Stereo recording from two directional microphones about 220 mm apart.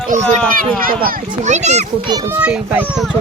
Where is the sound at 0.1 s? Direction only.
40° right (ahead or behind).